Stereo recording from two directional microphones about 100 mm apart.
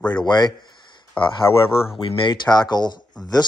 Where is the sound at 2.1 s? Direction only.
60° left (ahead or behind).